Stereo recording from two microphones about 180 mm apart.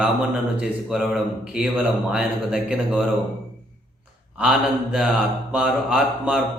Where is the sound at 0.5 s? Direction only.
Centre (ahead or behind).